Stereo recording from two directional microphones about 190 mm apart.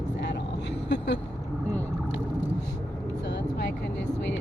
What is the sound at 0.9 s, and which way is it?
Vehicle, 65° left (ahead or behind).